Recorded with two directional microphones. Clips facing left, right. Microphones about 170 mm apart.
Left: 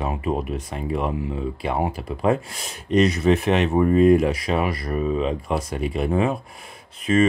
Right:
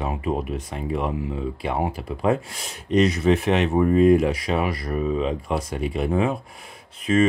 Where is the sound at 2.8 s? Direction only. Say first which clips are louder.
Left 1 dB; 50° left (ahead or behind).